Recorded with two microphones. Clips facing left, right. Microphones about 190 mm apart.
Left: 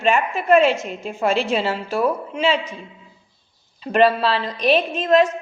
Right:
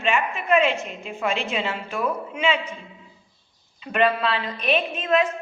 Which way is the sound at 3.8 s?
35° left (ahead or behind).